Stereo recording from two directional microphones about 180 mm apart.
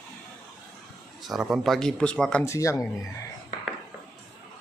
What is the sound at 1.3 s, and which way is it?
Speech, centre (ahead or behind).